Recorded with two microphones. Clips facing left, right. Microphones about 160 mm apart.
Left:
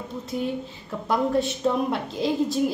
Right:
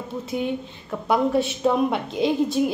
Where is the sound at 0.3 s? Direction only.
65° right (ahead or behind).